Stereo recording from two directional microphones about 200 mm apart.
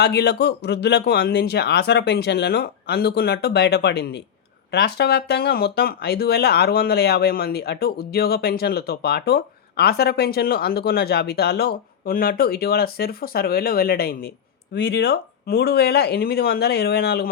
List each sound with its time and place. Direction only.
0.0 s a man's voice: 55° left (ahead or behind)